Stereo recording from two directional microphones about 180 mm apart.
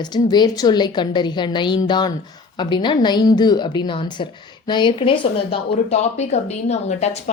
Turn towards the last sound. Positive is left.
turn(degrees=40)  # may be behind; listen again after turning